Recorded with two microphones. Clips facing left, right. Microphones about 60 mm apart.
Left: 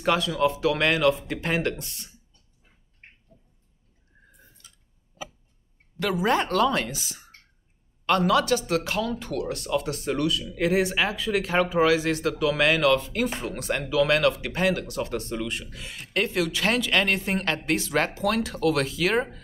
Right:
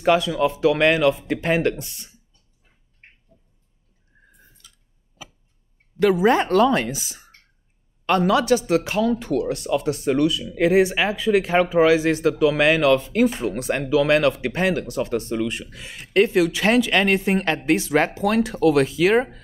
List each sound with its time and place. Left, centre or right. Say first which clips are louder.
0.0 s speech: right 4 dB; centre
5.9 s speech: right 7 dB; centre
10.4 s speech: right 6 dB; right